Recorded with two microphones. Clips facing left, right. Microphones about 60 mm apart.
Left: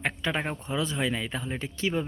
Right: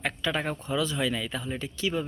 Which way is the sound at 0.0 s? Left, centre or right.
Left.